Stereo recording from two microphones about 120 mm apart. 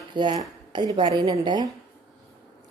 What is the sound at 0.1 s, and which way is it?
A woman's voice, 40° right (ahead or behind).